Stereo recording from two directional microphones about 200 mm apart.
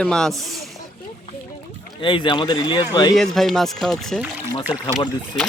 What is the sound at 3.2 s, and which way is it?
Speech, centre (ahead or behind).